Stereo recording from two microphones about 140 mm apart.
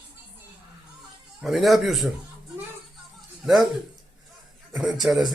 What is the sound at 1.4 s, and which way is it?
Speech, centre (ahead or behind).